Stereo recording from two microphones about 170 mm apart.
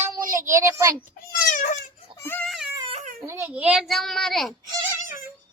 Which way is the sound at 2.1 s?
15° left (ahead or behind).